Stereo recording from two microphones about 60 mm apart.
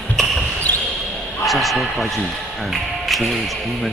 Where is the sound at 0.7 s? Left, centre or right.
Left.